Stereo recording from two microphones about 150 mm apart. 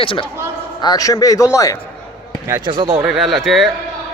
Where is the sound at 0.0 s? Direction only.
35° left (ahead or behind).